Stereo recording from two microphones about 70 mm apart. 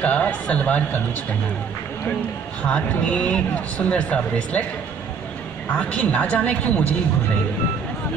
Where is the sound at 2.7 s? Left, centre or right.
Centre.